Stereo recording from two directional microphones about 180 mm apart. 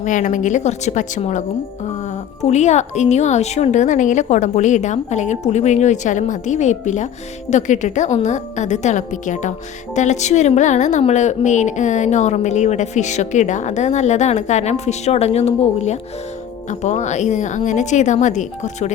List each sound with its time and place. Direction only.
0.0 s a woman's voice: 45° left (ahead or behind)